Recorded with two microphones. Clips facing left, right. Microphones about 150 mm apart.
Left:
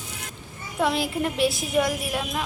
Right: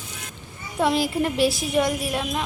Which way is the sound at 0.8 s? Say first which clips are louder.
Right 3 dB; centre (ahead or behind).